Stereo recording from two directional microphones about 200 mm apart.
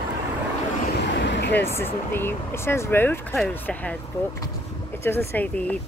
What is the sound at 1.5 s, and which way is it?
Speech, 10° left (ahead or behind).